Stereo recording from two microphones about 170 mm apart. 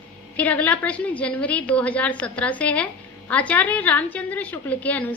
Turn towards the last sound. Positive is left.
turn(degrees=10)  # may be behind; listen again after turning